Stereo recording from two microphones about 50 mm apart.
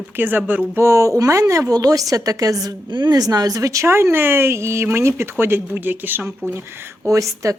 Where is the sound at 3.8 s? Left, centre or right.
Right.